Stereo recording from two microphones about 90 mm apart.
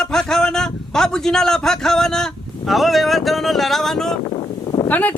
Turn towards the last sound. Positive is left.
turn(degrees=20)  # may be behind; listen again after turning